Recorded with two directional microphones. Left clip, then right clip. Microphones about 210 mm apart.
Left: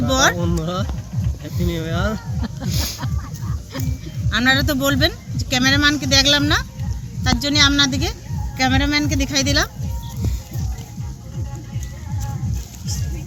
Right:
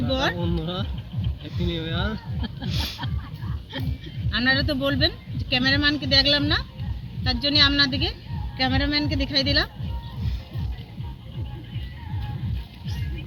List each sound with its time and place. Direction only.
0.1 s speech: centre (ahead or behind)
0.3 s speech: 20° left (ahead or behind)
4.3 s speech: centre (ahead or behind)